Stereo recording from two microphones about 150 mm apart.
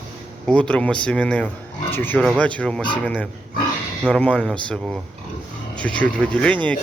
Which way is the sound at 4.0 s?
5° left (ahead or behind).